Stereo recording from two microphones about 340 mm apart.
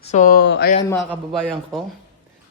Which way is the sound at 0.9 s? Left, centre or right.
Centre.